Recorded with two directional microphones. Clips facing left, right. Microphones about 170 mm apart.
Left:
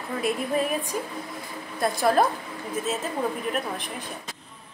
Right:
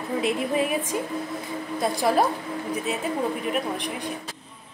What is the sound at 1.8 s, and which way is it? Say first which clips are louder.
Speech: left 1 dB; 15° right (ahead or behind).